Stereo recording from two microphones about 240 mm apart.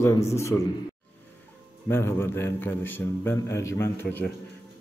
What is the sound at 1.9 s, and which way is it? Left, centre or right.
A man's voice, centre.